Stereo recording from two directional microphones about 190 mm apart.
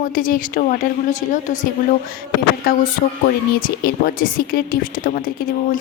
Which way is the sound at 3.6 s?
55° left (ahead or behind).